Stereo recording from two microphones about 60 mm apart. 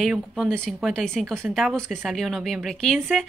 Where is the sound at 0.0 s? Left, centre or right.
Centre.